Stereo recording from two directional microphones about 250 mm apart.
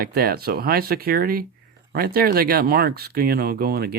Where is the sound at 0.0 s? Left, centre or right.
Right.